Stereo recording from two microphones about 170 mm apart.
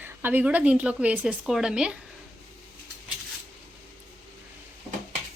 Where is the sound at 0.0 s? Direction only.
10° right (ahead or behind).